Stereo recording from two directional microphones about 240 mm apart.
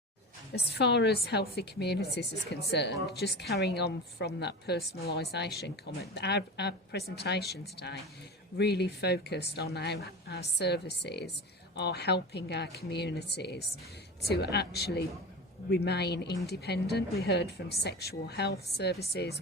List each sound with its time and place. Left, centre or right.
0.5 s a woman's voice: left